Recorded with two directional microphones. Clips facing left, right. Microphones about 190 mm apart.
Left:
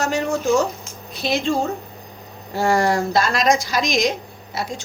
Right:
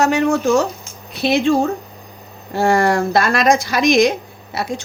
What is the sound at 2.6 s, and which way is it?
Speech, 55° right (ahead or behind).